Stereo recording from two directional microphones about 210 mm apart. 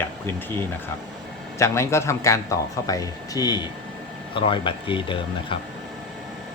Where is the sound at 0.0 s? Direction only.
10° left (ahead or behind).